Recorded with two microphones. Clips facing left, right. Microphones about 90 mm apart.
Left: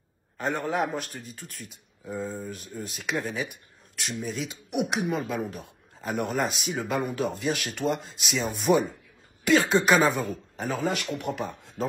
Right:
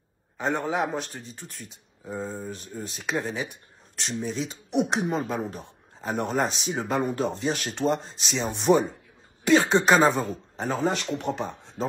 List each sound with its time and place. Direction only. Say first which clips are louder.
0.4 s a man's voice: right 1 dB; centre (ahead or behind)
1.3 s a man's voice: even; 30° right (ahead or behind)
3.4 s a sound: right 1 dB; 30° right (ahead or behind)
4.2 s a man's voice: right 3 dB; 30° right (ahead or behind)